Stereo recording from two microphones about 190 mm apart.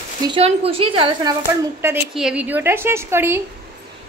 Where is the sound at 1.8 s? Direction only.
10° right (ahead or behind).